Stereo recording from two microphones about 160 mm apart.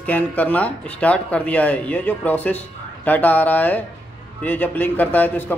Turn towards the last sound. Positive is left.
turn(degrees=10)  # may be behind; listen again after turning